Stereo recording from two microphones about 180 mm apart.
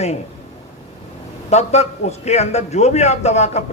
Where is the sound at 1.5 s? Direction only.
40° left (ahead or behind).